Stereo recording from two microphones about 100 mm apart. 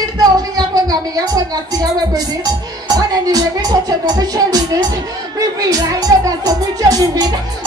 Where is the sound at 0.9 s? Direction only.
40° right (ahead or behind).